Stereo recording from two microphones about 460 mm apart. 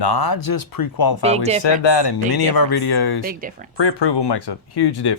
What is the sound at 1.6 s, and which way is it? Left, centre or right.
Speech, left.